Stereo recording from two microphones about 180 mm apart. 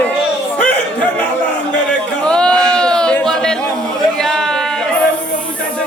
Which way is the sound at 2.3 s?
5° left (ahead or behind).